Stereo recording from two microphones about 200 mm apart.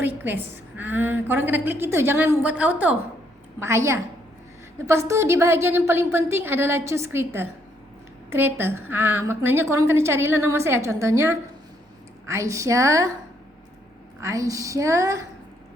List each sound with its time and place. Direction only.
0.0 s a woman's voice: 10° right (ahead or behind)
14.2 s a woman's voice: 15° right (ahead or behind)